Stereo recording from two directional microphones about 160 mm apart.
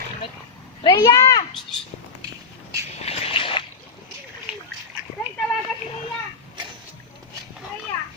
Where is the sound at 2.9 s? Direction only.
40° left (ahead or behind).